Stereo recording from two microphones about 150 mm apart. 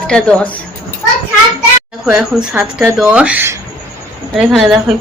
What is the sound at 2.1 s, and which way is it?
A woman's voice, 10° right (ahead or behind).